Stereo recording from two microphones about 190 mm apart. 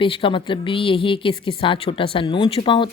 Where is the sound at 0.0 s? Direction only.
25° left (ahead or behind).